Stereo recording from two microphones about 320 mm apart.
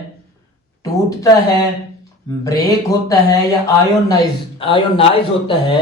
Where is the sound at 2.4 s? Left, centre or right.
Centre.